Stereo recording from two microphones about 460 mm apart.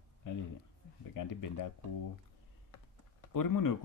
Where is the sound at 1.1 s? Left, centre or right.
Left.